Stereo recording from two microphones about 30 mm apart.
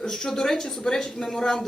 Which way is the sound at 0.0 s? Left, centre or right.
Centre.